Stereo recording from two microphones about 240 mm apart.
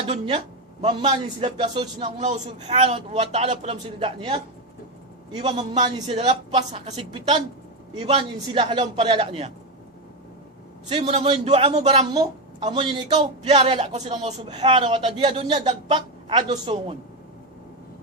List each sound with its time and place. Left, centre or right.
0.0 s a man's voice: right
10.8 s a man's voice: right
12.1 s a sound: centre
12.6 s a man's voice: right